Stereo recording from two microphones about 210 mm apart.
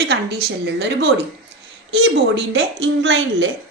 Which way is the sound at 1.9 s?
55° right (ahead or behind).